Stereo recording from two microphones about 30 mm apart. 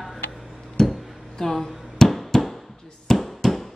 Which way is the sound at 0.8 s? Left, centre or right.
Centre.